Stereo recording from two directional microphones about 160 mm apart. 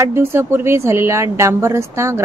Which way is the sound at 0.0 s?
15° right (ahead or behind).